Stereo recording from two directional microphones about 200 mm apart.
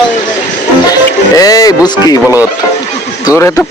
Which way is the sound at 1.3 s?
15° left (ahead or behind).